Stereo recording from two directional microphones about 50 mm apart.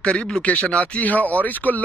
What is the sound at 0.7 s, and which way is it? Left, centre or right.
Speech, left.